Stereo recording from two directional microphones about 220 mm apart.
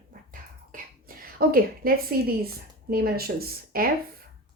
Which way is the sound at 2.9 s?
45° right (ahead or behind).